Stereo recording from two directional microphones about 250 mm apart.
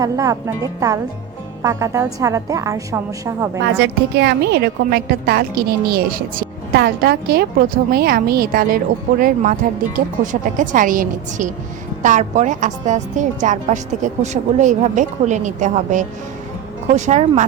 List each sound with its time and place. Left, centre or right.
0.0 s a woman's voice: centre
3.6 s a woman's voice: right